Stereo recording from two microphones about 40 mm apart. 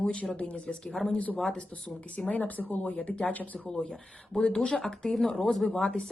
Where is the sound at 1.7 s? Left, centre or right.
Left.